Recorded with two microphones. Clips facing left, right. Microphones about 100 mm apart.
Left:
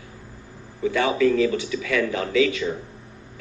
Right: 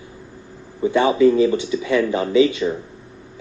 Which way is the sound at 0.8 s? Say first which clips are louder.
Right 5 dB; 25° right (ahead or behind).